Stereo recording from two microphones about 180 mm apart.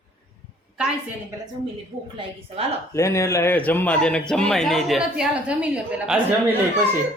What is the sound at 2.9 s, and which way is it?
A man's voice, 15° left (ahead or behind).